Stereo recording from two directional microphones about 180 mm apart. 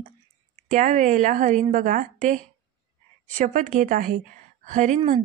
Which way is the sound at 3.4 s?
45° right (ahead or behind).